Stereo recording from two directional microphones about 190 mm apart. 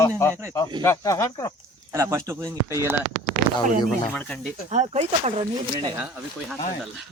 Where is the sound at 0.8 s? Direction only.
15° left (ahead or behind).